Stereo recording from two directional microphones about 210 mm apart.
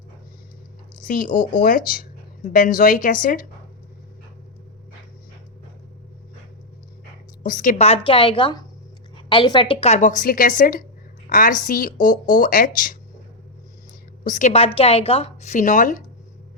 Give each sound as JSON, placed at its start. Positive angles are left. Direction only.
{"t": 1.0, "sound": "speech", "side_deg": 40}
{"t": 7.4, "sound": "speech", "side_deg": 40}
{"t": 14.3, "sound": "speech", "side_deg": 35}